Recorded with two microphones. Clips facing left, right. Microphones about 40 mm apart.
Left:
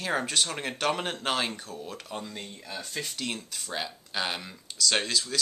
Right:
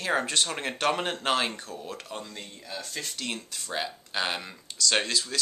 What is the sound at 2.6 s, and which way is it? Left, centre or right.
Speech, centre.